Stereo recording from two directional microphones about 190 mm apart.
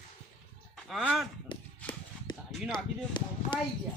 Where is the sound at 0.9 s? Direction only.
Centre (ahead or behind).